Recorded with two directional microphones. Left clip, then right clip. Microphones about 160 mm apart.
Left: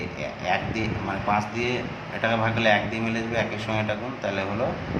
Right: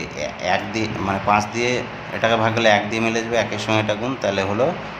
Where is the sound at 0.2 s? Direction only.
35° right (ahead or behind).